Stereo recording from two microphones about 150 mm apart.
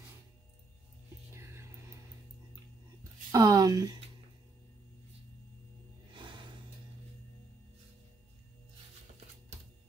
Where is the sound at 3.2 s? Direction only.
25° right (ahead or behind).